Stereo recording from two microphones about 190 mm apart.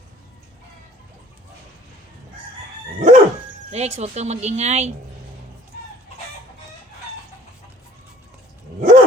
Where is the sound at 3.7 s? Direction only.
35° right (ahead or behind).